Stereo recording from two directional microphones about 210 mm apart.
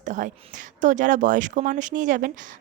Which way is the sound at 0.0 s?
35° right (ahead or behind).